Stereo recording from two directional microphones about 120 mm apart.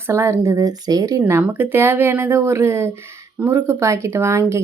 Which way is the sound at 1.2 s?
20° right (ahead or behind).